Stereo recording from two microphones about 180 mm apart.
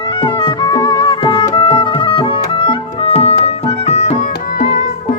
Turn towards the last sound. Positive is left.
turn(degrees=40)  # may be behind; listen again after turning